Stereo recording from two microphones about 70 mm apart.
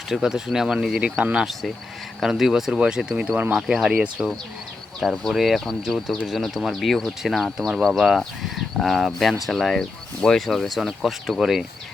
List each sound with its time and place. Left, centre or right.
0.1 s speech: centre
1.0 s speech: centre
2.4 s speech: centre
5.3 s speech: centre